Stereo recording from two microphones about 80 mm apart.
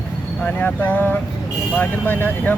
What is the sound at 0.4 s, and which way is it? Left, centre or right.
Speech, centre.